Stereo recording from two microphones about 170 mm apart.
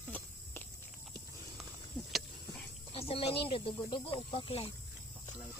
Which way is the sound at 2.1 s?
Centre (ahead or behind).